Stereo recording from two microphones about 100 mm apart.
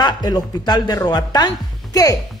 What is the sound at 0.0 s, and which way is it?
Speech, 45° left (ahead or behind).